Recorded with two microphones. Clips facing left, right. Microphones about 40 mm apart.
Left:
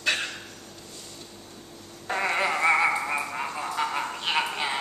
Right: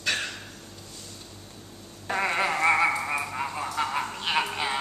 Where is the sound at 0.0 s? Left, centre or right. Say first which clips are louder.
Left 2 dB; centre.